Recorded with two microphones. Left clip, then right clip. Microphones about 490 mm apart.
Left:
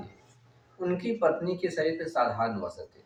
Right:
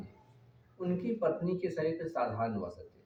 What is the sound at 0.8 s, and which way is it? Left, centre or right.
Speech, right.